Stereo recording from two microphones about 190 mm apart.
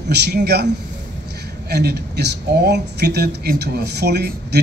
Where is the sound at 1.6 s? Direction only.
60° right (ahead or behind).